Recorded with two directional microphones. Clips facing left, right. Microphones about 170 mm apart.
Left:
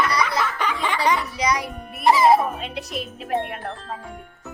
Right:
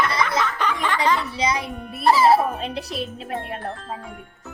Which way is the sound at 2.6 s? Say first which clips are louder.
Right 2 dB; 35° right (ahead or behind).